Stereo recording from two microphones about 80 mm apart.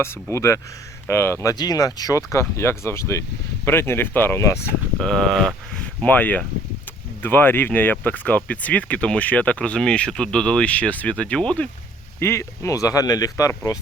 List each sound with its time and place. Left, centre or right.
0.0 s speech: left
1.5 s speech: left
4.9 s speech: centre
6.0 s speech: left
12.2 s speech: left